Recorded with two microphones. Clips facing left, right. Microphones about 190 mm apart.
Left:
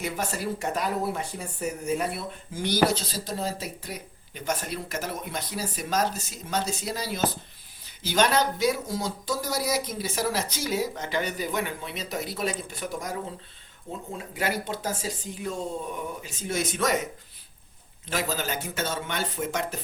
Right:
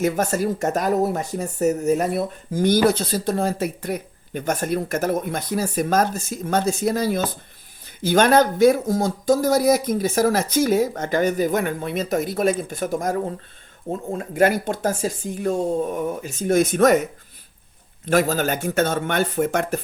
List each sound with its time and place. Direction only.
0.0 s speech: 45° right (ahead or behind)
18.0 s speech: 50° right (ahead or behind)